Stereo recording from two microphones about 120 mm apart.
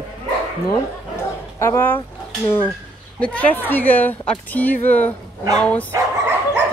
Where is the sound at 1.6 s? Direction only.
20° left (ahead or behind).